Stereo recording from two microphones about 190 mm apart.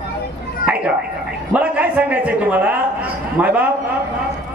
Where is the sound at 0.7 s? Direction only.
5° right (ahead or behind).